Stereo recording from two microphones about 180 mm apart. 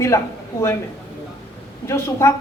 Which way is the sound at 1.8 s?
15° left (ahead or behind).